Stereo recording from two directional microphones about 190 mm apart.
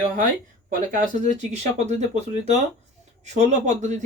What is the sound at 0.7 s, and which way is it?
Speech, 45° right (ahead or behind).